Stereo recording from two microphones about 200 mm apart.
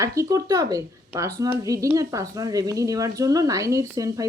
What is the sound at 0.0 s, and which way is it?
Speech, 15° right (ahead or behind).